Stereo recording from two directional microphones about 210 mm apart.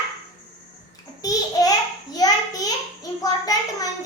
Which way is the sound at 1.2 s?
15° left (ahead or behind).